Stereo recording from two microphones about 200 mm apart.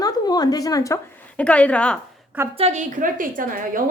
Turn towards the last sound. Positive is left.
turn(degrees=-40)  # may be behind; listen again after turning